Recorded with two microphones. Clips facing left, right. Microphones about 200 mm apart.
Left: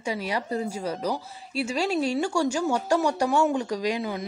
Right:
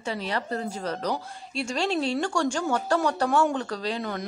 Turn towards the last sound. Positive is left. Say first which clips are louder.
# left 3 dB
turn(degrees=10)  # may be behind; listen again after turning